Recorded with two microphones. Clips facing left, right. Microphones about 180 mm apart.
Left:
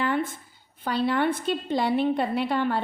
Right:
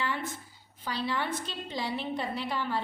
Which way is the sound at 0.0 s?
55° left (ahead or behind).